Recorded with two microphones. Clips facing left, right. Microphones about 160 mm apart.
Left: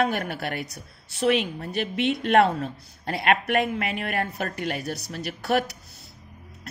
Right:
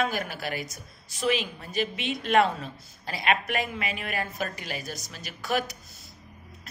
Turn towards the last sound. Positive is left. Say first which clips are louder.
# left 5 dB
turn(degrees=70)  # may be behind; listen again after turning